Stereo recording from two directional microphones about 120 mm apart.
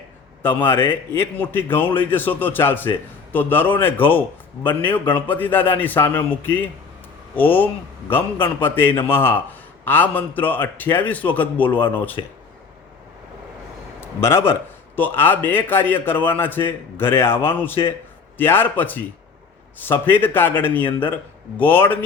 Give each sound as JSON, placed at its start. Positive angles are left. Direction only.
{"t": 0.6, "sound": "a man's voice", "side_deg": 20}
{"t": 14.0, "sound": "a man's voice", "side_deg": 20}